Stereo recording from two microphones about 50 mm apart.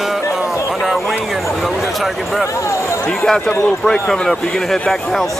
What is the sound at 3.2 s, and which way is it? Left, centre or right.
Speech, left.